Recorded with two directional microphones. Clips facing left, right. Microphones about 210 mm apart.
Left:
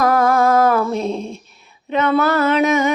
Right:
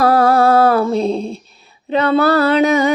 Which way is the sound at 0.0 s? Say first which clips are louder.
Right 3 dB; 30° right (ahead or behind).